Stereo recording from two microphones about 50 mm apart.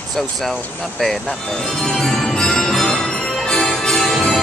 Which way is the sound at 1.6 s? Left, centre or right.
Centre.